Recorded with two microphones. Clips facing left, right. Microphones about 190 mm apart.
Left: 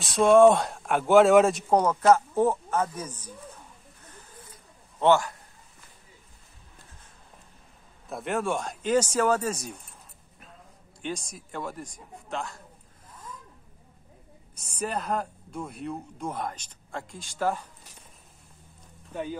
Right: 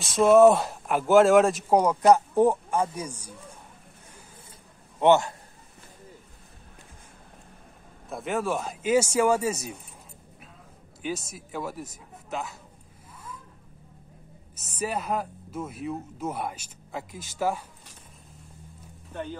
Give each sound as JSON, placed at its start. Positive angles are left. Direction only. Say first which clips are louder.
{"t": 0.0, "sound": "speech", "louder": "right 1 dB", "side_deg": 0}
{"t": 1.8, "sound": "speech", "louder": "right 2 dB", "side_deg": -15}
{"t": 5.0, "sound": "a man's voice", "louder": "right 2 dB", "side_deg": -20}
{"t": 8.1, "sound": "speech", "louder": "even", "side_deg": 0}
{"t": 11.0, "sound": "speech", "louder": "right 2 dB", "side_deg": -5}
{"t": 14.5, "sound": "speech", "louder": "right 1 dB", "side_deg": -5}